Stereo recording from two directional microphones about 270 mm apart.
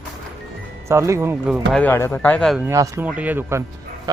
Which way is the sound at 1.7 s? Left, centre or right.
Centre.